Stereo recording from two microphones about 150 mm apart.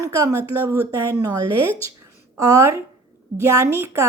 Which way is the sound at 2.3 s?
20° right (ahead or behind).